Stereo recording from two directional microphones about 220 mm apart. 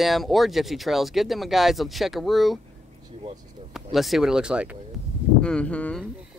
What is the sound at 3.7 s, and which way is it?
Speech, centre (ahead or behind).